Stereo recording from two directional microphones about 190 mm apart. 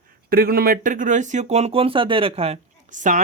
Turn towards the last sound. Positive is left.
turn(degrees=-40)  # may be behind; listen again after turning